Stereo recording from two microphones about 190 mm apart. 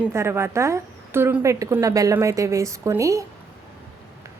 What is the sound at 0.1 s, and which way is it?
A woman's voice, 15° right (ahead or behind).